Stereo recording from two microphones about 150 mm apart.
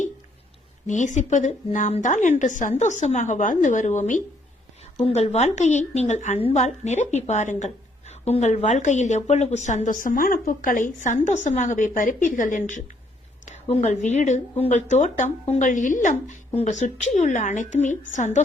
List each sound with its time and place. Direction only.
0.9 s a woman's voice: 55° left (ahead or behind)